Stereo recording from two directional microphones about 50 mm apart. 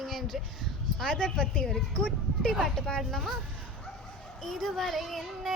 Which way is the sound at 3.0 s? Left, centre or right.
Centre.